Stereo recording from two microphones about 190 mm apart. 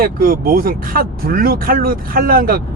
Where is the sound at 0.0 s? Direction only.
50° right (ahead or behind).